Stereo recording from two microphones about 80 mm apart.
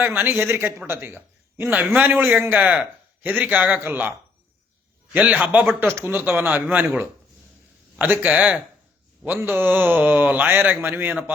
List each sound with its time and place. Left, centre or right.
0.0 s a man's voice: right
5.1 s a man's voice: centre
7.9 s a man's voice: right